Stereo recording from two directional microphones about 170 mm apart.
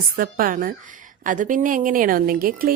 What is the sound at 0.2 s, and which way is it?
A woman's voice, 55° right (ahead or behind).